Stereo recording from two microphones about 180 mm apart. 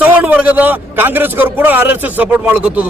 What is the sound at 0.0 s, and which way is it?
A man's voice, 10° right (ahead or behind).